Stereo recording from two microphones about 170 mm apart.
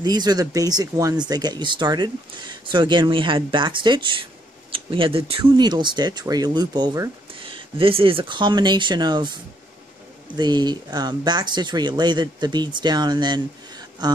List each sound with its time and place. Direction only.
0.0 s speech: 25° right (ahead or behind)